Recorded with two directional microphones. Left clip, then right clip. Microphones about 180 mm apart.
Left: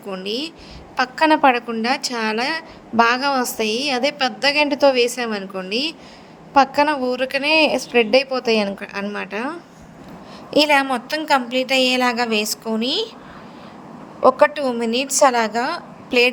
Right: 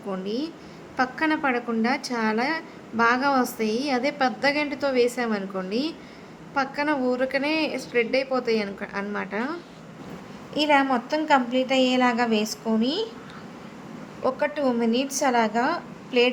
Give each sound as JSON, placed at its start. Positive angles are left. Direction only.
{"t": 0.1, "sound": "a woman's voice", "side_deg": 40}
{"t": 10.5, "sound": "a woman's voice", "side_deg": 50}
{"t": 14.2, "sound": "a woman's voice", "side_deg": 45}